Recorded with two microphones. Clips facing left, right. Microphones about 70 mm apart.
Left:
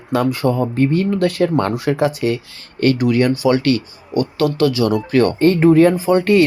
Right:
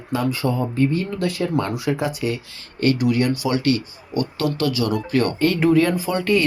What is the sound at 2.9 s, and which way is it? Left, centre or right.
Speech, left.